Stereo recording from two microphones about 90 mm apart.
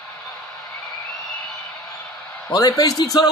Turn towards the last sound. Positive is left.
turn(degrees=45)  # may be behind; listen again after turning